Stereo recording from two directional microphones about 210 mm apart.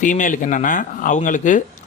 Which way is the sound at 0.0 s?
35° left (ahead or behind).